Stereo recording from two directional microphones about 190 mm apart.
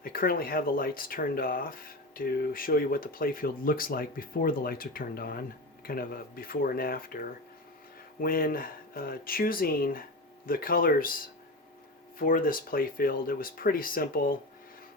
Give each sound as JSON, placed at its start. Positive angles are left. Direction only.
{"t": 0.0, "sound": "speech", "side_deg": 50}
{"t": 12.2, "sound": "speech", "side_deg": 45}